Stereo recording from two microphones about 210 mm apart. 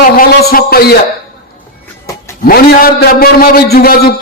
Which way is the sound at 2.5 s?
45° left (ahead or behind).